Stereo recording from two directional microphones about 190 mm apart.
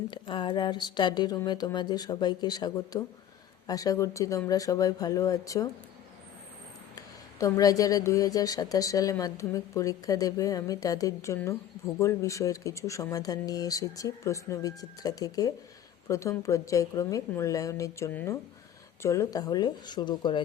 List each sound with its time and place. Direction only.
0.1 s speech: 25° left (ahead or behind)
6.9 s speech: 20° left (ahead or behind)